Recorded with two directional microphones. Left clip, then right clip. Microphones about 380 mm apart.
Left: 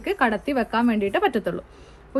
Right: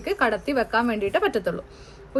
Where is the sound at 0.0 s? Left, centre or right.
Centre.